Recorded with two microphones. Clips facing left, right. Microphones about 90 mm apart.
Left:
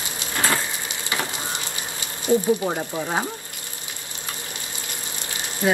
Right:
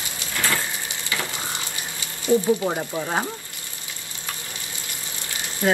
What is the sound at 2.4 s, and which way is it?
Speech, centre (ahead or behind).